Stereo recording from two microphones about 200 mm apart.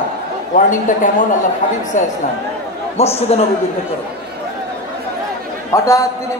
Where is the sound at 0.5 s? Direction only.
40° left (ahead or behind).